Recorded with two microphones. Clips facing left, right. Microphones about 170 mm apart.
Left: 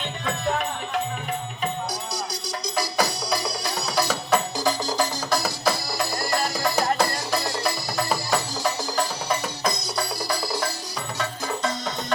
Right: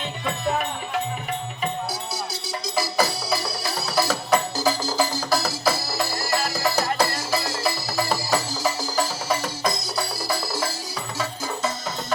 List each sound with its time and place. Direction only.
1.9 s music: centre (ahead or behind)